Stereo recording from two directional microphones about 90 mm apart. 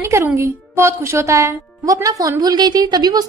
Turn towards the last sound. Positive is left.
turn(degrees=-50)  # may be behind; listen again after turning